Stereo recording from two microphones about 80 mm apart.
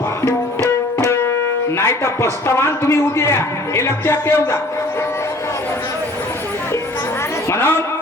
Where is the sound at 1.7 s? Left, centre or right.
Left.